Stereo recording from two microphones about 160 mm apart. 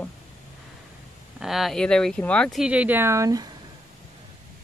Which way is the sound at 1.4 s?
Centre (ahead or behind).